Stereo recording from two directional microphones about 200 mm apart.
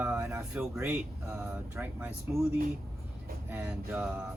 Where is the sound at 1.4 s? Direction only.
10° right (ahead or behind).